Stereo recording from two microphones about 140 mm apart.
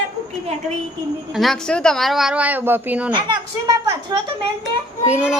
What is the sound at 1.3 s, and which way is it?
Speech, centre (ahead or behind).